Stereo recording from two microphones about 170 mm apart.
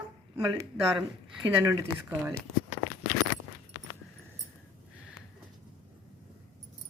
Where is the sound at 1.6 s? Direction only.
15° right (ahead or behind).